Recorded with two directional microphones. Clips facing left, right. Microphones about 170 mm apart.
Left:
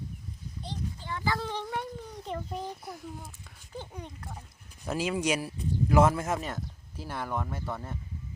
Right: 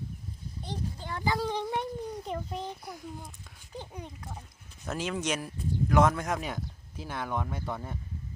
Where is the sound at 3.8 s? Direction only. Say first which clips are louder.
Even; 10° right (ahead or behind).